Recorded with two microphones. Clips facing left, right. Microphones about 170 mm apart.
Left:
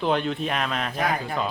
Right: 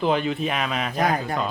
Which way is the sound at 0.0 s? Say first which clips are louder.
Right 2 dB; centre (ahead or behind).